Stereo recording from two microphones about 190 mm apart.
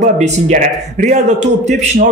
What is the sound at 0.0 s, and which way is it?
A man's voice, 40° right (ahead or behind).